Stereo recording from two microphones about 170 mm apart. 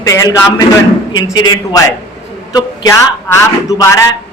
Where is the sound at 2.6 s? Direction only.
20° left (ahead or behind).